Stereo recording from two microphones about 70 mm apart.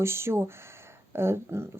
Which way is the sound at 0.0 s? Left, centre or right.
Right.